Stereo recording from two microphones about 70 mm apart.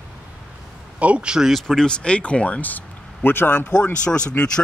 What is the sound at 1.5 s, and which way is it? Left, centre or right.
Speech, centre.